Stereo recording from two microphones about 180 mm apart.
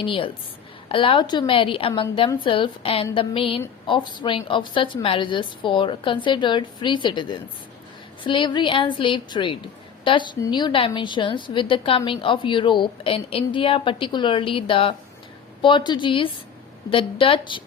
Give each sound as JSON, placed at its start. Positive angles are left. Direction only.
{"t": 0.0, "sound": "a woman's voice", "side_deg": 30}